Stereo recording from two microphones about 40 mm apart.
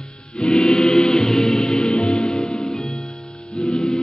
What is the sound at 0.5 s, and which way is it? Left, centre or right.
Music, centre.